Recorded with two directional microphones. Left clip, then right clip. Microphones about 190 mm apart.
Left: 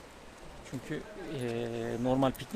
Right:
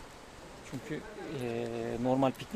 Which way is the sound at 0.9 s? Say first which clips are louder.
Left 1 dB; 10° left (ahead or behind).